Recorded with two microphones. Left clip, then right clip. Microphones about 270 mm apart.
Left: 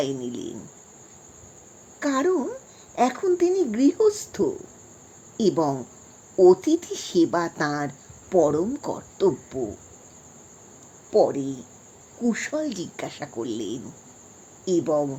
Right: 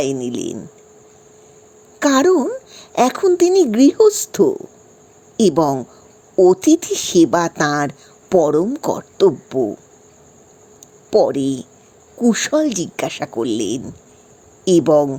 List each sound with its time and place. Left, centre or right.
0.0 s speech: right
2.0 s a woman's voice: right
11.1 s speech: right